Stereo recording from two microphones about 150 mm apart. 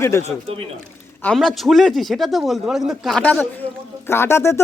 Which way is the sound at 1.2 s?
5° left (ahead or behind).